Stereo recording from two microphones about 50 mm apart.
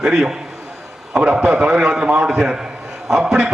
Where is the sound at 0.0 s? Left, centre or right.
Centre.